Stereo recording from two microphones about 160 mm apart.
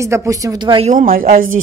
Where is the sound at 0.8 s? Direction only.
55° right (ahead or behind).